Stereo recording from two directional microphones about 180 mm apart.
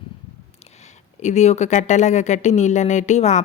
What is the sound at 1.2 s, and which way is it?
Speech, 40° left (ahead or behind).